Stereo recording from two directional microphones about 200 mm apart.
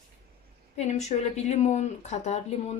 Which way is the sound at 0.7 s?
35° left (ahead or behind).